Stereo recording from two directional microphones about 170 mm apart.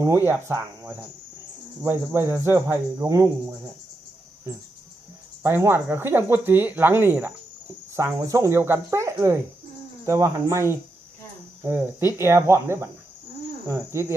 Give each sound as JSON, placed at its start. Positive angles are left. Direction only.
{"t": 0.0, "sound": "speech", "side_deg": -15}
{"t": 5.4, "sound": "speech", "side_deg": -15}